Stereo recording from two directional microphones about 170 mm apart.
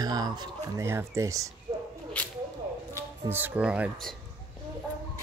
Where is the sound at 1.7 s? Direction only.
35° right (ahead or behind).